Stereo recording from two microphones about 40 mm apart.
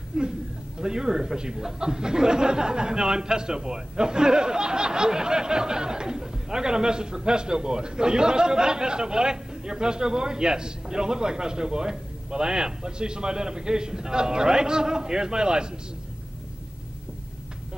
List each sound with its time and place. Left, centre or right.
0.1 s speech: centre